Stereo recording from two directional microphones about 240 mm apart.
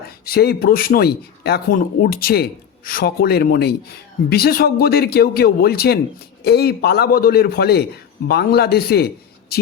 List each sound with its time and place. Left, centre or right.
0.3 s speech: left